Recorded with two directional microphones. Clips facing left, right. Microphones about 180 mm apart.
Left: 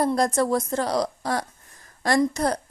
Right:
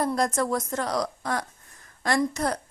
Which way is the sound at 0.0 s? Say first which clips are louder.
Left 3 dB; 35° left (ahead or behind).